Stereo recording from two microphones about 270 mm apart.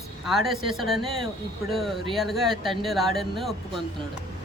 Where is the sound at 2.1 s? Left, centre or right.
Centre.